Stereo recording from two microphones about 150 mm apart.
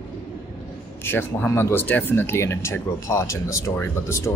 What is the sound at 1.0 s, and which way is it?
Speech, 15° left (ahead or behind).